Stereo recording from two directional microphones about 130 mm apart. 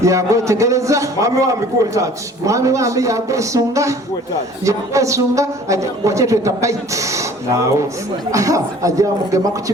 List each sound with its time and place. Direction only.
0.0 s a man's voice: 25° right (ahead or behind)
8.3 s a man's voice: 25° right (ahead or behind)